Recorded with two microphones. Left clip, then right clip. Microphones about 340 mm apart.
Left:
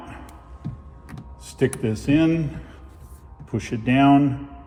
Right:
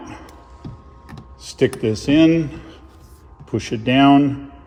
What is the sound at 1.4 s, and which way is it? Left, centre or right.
A man's voice, right.